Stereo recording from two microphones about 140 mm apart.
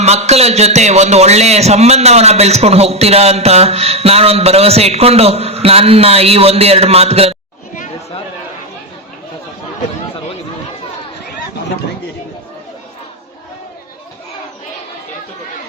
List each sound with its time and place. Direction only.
0.0 s a man's voice: 50° right (ahead or behind)